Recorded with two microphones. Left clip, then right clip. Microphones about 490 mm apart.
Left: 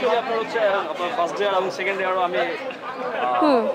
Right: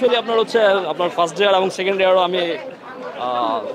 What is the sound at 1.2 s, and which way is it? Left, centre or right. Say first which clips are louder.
Speech: right 6 dB; right.